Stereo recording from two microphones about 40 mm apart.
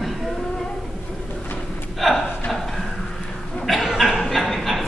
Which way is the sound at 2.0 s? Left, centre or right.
Centre.